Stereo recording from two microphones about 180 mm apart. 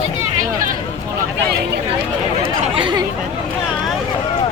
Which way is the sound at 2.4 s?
30° right (ahead or behind).